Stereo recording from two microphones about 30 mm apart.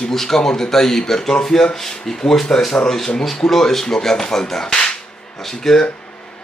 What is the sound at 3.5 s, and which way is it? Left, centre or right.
Speech, centre.